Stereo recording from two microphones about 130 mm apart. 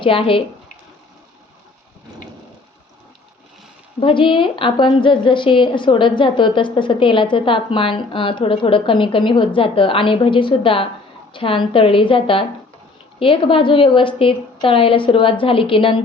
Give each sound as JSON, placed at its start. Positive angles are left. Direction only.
{"t": 0.0, "sound": "a woman's voice", "side_deg": 45}
{"t": 4.0, "sound": "a woman's voice", "side_deg": 40}